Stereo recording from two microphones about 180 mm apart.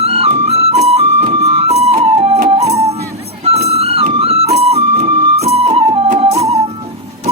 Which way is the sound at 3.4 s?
35° right (ahead or behind).